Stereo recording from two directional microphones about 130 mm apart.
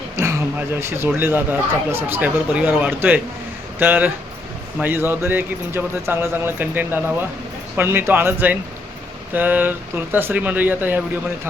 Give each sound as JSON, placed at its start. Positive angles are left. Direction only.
{"t": 0.2, "sound": "speech", "side_deg": -20}